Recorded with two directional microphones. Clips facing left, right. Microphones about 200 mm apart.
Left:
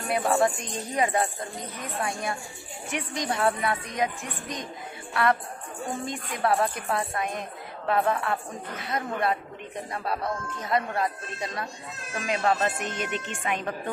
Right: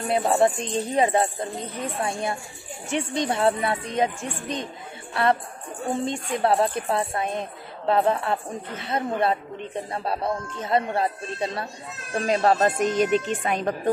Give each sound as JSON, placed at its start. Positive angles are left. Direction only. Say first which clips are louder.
{"t": 0.1, "sound": "a woman's voice", "louder": "right 3 dB", "side_deg": -25}